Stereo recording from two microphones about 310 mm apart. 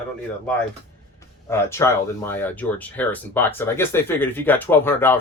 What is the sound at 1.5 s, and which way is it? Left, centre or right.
Speech, centre.